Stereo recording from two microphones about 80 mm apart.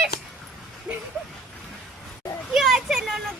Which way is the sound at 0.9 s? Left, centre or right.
Centre.